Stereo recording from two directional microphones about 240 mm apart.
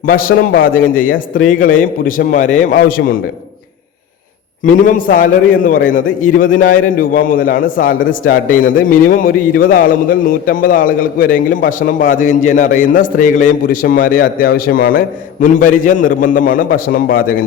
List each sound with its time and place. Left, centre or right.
0.1 s a man's voice: left
4.6 s a man's voice: left